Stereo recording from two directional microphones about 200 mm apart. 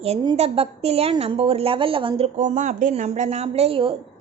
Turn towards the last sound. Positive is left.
turn(degrees=-25)  # may be behind; listen again after turning